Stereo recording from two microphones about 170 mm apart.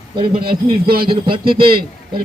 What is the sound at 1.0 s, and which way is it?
A man's voice, 30° right (ahead or behind).